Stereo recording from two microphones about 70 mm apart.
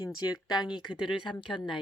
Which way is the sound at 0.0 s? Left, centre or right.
Left.